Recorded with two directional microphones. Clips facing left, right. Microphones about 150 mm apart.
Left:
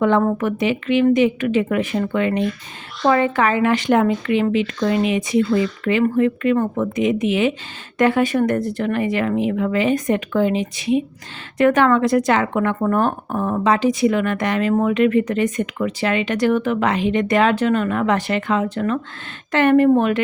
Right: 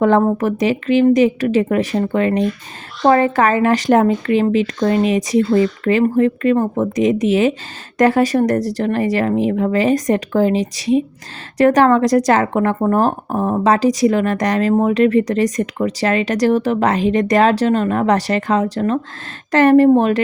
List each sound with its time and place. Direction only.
0.3 s speech: 40° right (ahead or behind)